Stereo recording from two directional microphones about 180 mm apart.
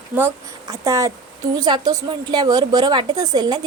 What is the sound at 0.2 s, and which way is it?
A woman's voice, 15° right (ahead or behind).